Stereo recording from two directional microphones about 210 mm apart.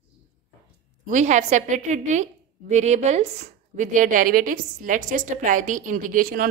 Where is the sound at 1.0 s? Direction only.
35° right (ahead or behind).